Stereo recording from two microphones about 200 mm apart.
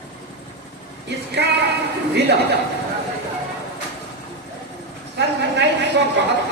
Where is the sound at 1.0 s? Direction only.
55° right (ahead or behind).